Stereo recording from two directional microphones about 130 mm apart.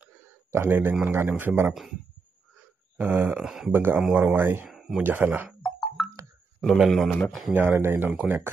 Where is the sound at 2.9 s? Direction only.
15° right (ahead or behind).